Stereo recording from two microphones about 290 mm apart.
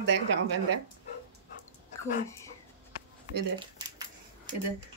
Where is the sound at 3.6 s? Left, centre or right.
Centre.